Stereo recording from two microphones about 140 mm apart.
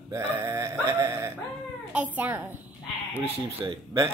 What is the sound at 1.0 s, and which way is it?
Wail, 20° right (ahead or behind).